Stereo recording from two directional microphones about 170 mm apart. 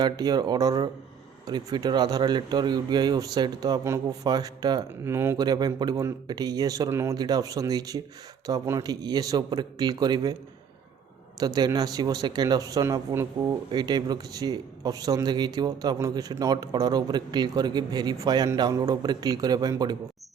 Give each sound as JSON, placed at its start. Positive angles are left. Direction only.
{"t": 0.0, "sound": "speech", "side_deg": -25}
{"t": 11.3, "sound": "speech", "side_deg": -25}